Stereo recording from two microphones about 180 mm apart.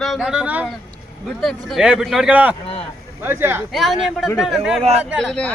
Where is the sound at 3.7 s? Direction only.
Centre (ahead or behind).